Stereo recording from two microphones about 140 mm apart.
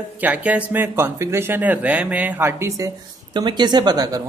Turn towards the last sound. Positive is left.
turn(degrees=-25)  # may be behind; listen again after turning